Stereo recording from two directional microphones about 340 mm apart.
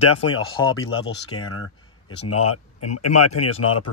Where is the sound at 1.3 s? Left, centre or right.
Left.